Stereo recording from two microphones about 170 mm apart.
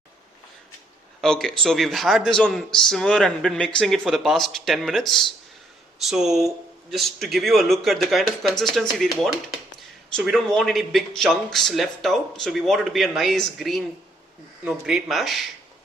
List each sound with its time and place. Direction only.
1.2 s speech: 5° left (ahead or behind)